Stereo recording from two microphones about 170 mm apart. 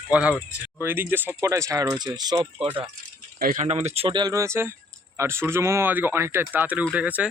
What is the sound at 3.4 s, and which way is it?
Speech, 55° right (ahead or behind).